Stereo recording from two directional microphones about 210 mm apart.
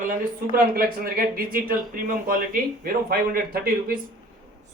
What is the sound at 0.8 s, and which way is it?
Speech, 45° right (ahead or behind).